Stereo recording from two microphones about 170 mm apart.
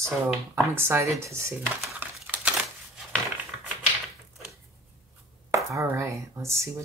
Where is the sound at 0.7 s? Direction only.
15° right (ahead or behind).